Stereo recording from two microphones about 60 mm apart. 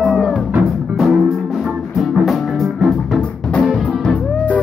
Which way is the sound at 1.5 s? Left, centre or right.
Centre.